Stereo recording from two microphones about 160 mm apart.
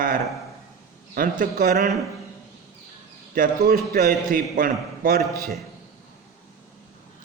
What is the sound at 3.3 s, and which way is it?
A man's voice, 65° right (ahead or behind).